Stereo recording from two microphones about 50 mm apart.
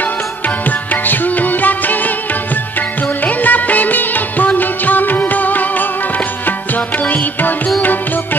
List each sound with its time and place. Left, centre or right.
0.7 s music: left
3.3 s music: left
4.6 s music of bollywood: left